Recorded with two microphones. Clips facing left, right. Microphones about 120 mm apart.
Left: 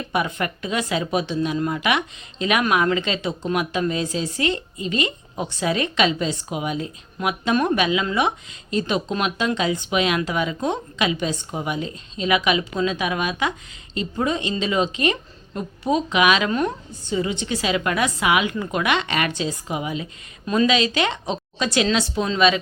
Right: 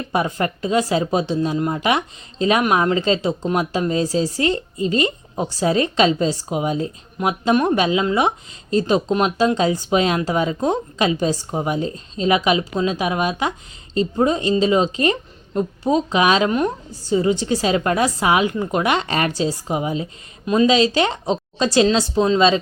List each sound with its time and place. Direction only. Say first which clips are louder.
0.1 s speech: right 3 dB; 30° right (ahead or behind)
17.1 s speech: right 6 dB; 35° right (ahead or behind)